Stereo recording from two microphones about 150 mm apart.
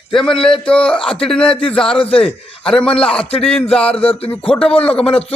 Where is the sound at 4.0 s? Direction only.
40° left (ahead or behind).